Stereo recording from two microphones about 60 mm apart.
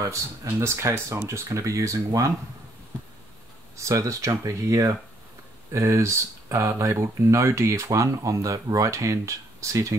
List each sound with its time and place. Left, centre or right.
0.0 s speech: right
0.6 s speech: right
3.7 s speech: right